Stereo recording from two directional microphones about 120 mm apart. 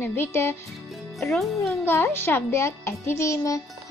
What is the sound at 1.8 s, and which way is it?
A child's voice, 20° left (ahead or behind).